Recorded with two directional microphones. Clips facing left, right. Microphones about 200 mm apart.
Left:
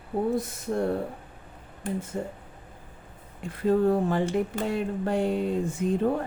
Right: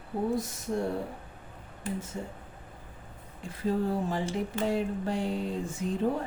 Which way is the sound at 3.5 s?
60° left (ahead or behind).